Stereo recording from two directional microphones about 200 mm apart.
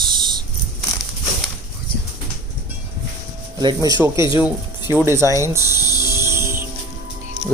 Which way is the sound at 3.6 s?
20° right (ahead or behind).